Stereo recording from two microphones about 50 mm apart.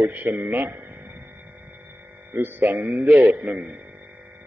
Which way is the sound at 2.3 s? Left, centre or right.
Right.